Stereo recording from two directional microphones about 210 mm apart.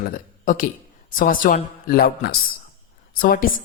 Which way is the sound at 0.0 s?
40° left (ahead or behind).